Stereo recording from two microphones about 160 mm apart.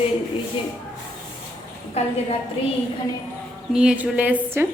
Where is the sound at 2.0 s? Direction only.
40° left (ahead or behind).